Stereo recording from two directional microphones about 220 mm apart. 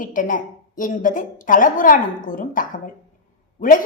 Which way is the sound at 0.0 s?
40° left (ahead or behind).